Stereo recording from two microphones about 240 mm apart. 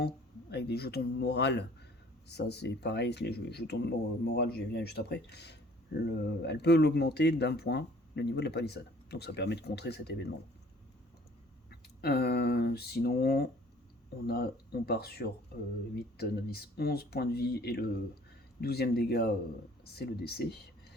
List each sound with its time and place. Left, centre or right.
0.5 s speech: left
11.7 s speech: left